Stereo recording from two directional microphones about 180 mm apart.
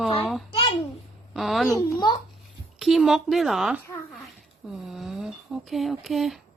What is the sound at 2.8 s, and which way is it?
Speech, centre (ahead or behind).